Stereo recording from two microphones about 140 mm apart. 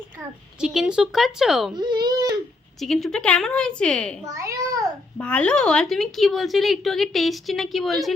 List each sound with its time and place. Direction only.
0.6 s speech: 5° right (ahead or behind)
1.7 s baby cry: 30° right (ahead or behind)
2.8 s speech: 5° left (ahead or behind)
4.3 s a child's voice: 25° right (ahead or behind)
5.1 s speech: 10° left (ahead or behind)